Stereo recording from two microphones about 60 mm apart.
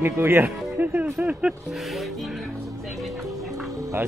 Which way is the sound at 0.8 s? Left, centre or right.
Right.